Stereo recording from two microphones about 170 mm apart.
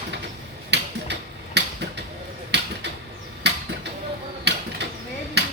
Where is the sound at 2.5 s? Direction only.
90° right.